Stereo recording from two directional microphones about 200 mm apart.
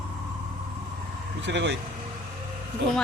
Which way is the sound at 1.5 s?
60° right (ahead or behind).